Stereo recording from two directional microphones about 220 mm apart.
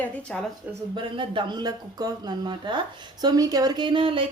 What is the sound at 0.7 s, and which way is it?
Speech, 20° right (ahead or behind).